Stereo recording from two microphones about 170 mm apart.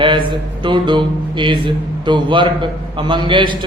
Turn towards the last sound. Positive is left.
turn(degrees=-25)  # may be behind; listen again after turning